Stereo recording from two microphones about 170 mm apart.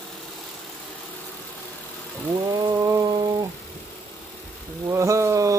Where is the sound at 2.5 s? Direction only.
25° right (ahead or behind).